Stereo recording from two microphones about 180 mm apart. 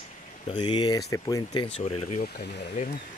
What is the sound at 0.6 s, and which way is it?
Speech, 25° left (ahead or behind).